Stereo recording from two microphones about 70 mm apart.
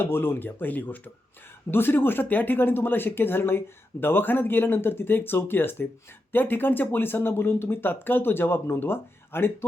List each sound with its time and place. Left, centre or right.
0.0 s speech: left